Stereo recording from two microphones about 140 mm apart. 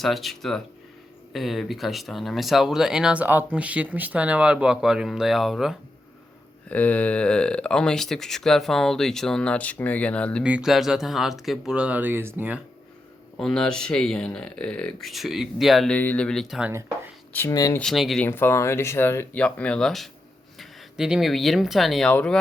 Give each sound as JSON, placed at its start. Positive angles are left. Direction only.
{"t": 0.0, "sound": "speech", "side_deg": 0}
{"t": 6.7, "sound": "speech", "side_deg": 10}
{"t": 10.4, "sound": "speech", "side_deg": -5}
{"t": 13.3, "sound": "speech", "side_deg": 5}
{"t": 17.5, "sound": "speech", "side_deg": 25}
{"t": 17.7, "sound": "speech", "side_deg": 0}
{"t": 18.2, "sound": "speech", "side_deg": 15}